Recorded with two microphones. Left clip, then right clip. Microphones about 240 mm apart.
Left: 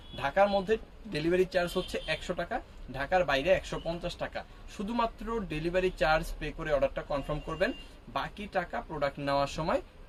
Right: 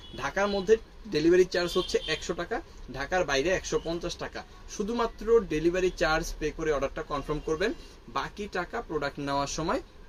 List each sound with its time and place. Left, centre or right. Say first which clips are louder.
0.7 s speech: right 7 dB; centre